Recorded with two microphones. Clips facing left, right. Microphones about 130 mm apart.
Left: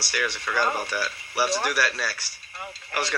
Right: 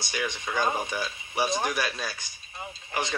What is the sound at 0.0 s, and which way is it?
Speech, 20° right (ahead or behind).